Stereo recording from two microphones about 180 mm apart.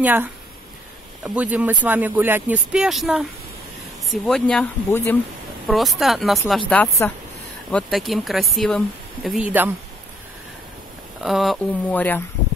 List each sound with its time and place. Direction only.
0.0 s speech: 10° right (ahead or behind)
11.2 s speech: centre (ahead or behind)